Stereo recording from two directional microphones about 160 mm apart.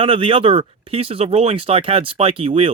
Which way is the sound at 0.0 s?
35° right (ahead or behind).